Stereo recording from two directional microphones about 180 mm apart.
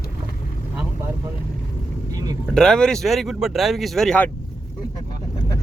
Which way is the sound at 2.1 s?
20° right (ahead or behind).